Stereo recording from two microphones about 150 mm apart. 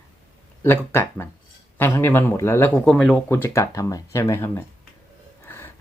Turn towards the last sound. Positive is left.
turn(degrees=15)  # may be behind; listen again after turning